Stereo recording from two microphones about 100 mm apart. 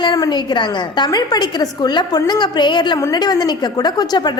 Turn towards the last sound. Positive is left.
turn(degrees=45)  # may be behind; listen again after turning